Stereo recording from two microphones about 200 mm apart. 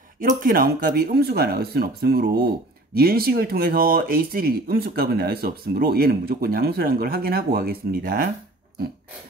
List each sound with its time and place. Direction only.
0.2 s speech: 45° right (ahead or behind)